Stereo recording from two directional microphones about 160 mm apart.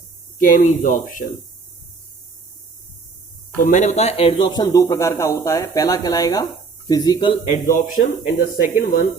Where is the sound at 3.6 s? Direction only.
50° left (ahead or behind); by 7.4 s 25° left (ahead or behind).